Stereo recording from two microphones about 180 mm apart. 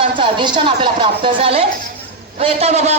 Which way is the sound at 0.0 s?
30° right (ahead or behind).